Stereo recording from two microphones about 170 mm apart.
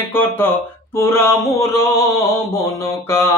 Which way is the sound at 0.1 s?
10° left (ahead or behind).